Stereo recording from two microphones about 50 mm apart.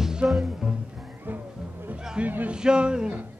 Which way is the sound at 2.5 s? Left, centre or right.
Centre.